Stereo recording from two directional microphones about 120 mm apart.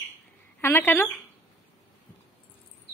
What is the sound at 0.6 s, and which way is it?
Speech, 20° left (ahead or behind).